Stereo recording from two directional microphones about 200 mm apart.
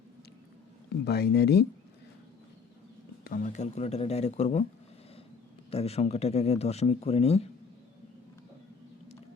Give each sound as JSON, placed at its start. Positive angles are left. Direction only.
{"t": 1.0, "sound": "speech", "side_deg": 55}
{"t": 3.2, "sound": "speech", "side_deg": 40}
{"t": 5.7, "sound": "speech", "side_deg": 30}